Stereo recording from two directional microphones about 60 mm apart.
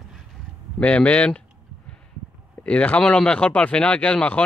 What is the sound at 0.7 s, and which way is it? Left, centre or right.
Speech, left.